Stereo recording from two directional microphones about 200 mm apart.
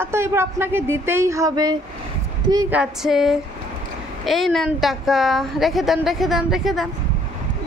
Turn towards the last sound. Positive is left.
turn(degrees=0)  # may be behind; listen again after turning